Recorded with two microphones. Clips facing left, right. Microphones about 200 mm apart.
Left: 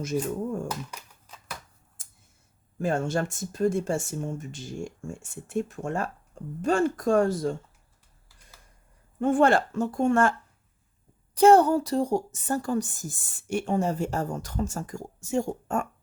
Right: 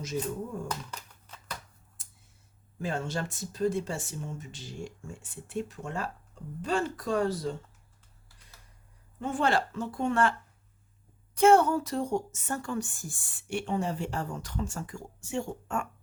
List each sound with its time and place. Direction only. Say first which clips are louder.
0.9 s a sound: even; 10° left (ahead or behind)
2.7 s speech: left 6 dB; 50° left (ahead or behind)
9.2 s speech: left 7 dB; 50° left (ahead or behind)
11.3 s a woman's voice: left 4 dB; 35° left (ahead or behind)